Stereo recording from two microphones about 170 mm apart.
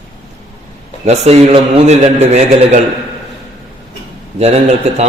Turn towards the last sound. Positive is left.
turn(degrees=-40)  # may be behind; listen again after turning